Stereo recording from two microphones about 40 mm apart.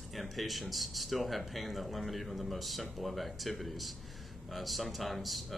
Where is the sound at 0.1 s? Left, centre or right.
Centre.